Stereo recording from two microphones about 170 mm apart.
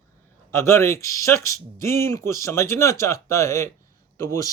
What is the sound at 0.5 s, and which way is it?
Speech, 15° left (ahead or behind).